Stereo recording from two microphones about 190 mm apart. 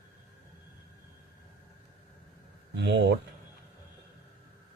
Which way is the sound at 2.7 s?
65° right (ahead or behind).